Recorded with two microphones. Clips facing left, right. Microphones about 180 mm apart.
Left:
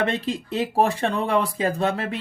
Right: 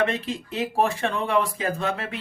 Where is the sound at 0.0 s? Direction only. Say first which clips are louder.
Left 1 dB; 35° left (ahead or behind).